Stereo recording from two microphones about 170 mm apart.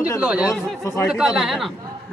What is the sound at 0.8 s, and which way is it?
Speech, 15° left (ahead or behind).